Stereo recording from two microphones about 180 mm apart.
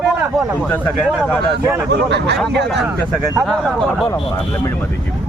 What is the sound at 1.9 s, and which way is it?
Speech, 70° right (ahead or behind).